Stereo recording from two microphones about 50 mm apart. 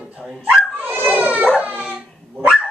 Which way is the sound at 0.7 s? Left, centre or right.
Right.